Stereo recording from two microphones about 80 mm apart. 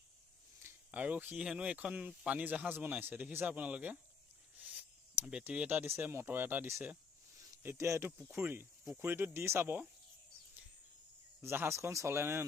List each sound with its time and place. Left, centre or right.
0.9 s speech: centre
11.3 s speech: right